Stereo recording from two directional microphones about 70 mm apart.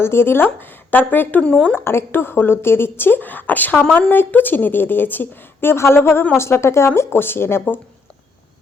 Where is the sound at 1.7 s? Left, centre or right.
Left.